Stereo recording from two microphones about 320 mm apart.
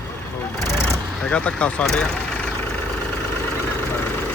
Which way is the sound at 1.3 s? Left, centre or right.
Centre.